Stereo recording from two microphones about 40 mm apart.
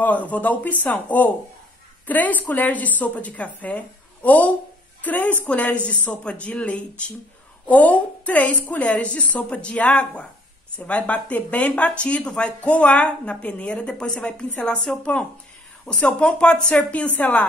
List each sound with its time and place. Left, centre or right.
0.0 s a woman's voice: left
5.5 s a woman's voice: left